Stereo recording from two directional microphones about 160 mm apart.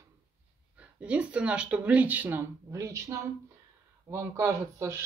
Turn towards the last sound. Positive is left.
turn(degrees=-15)  # may be behind; listen again after turning